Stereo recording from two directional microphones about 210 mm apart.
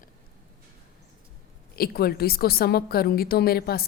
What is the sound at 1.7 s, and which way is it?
A woman's voice, 45° left (ahead or behind).